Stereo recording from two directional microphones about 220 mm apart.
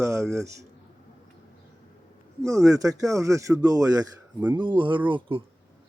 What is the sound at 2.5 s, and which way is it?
A man's voice, 15° right (ahead or behind).